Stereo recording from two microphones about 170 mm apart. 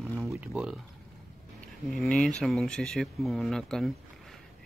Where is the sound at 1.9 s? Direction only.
5° left (ahead or behind).